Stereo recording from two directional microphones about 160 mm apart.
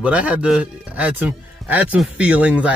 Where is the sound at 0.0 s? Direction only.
10° right (ahead or behind).